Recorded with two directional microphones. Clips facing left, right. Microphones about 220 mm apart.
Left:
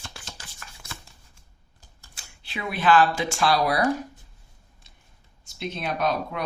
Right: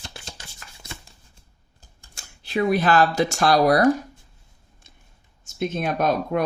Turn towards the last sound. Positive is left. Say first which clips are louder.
# right 5 dB
turn(degrees=-50)  # may be behind; listen again after turning